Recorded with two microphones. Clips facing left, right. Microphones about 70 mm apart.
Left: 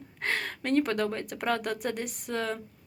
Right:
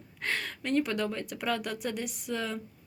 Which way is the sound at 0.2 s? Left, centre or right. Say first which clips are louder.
Left 2 dB; left.